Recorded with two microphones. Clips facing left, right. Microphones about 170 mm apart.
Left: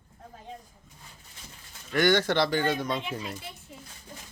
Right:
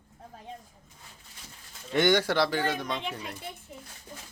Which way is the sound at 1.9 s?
20° right (ahead or behind).